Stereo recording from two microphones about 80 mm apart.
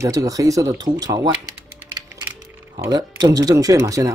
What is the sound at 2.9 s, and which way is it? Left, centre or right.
Speech, right.